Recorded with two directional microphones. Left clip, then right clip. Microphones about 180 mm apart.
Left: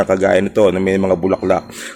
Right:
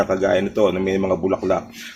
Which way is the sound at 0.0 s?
55° left (ahead or behind).